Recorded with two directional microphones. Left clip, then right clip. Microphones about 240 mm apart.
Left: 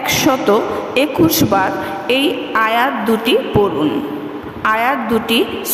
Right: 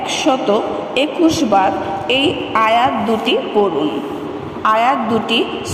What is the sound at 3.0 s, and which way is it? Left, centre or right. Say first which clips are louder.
Speech: left 2 dB; left.